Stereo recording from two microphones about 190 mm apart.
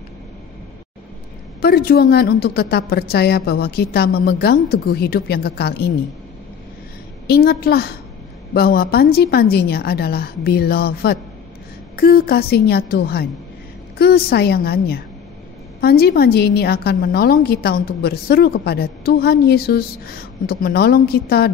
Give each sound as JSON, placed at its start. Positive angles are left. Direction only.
{"t": 1.6, "sound": "a woman's voice", "side_deg": 55}
{"t": 7.2, "sound": "a woman's voice", "side_deg": 55}